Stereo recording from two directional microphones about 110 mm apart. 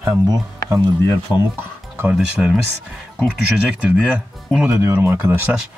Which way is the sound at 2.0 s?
10° right (ahead or behind).